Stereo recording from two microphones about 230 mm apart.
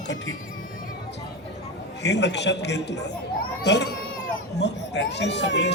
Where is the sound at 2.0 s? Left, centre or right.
Left.